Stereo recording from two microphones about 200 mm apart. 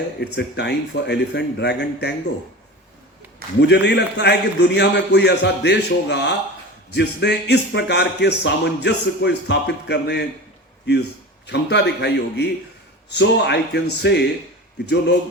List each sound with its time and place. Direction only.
0.2 s speech: 60° left (ahead or behind)
3.6 s speech: 60° left (ahead or behind)
11.4 s speech: 60° left (ahead or behind)